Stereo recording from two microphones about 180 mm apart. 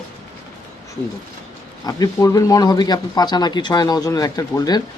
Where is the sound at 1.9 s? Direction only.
20° left (ahead or behind).